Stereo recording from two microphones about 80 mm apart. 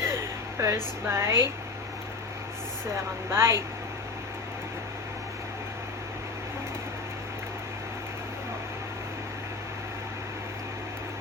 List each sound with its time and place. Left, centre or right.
0.0 s speech: right
2.9 s a woman's voice: right